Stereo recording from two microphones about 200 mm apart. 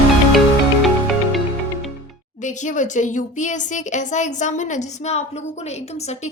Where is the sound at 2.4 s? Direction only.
40° left (ahead or behind).